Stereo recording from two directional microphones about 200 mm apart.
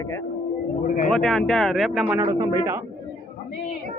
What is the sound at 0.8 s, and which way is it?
Speech, 40° left (ahead or behind).